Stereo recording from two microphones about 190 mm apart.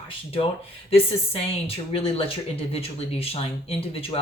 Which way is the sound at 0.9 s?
30° left (ahead or behind).